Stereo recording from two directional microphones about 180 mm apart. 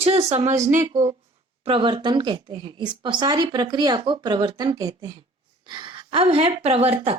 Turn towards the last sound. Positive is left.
turn(degrees=-35)  # may be behind; listen again after turning